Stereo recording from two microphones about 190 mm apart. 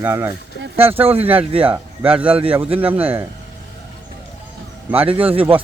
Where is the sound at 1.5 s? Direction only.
30° right (ahead or behind).